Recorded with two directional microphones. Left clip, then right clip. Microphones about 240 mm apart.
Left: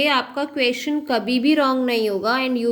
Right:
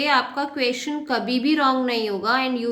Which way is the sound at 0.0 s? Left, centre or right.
Left.